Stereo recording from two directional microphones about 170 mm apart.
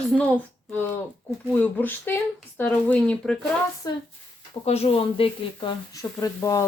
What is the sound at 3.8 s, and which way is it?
Speech, 25° left (ahead or behind).